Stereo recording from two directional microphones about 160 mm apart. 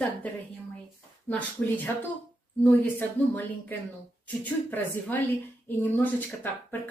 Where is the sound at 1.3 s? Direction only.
10° left (ahead or behind).